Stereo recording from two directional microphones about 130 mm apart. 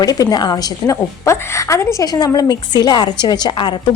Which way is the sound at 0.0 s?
30° left (ahead or behind).